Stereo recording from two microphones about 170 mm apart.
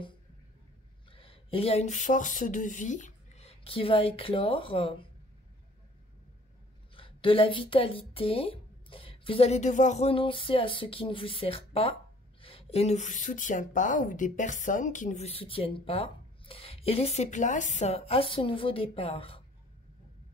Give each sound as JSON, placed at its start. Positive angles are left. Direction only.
{"t": 1.1, "sound": "speech", "side_deg": 35}
{"t": 7.0, "sound": "a woman's voice", "side_deg": 30}